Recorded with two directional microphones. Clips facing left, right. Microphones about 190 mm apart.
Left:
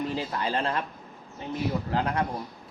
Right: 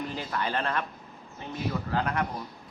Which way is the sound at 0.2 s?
25° left (ahead or behind).